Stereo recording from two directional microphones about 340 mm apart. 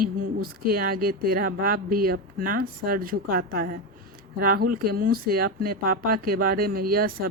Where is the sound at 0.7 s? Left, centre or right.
Right.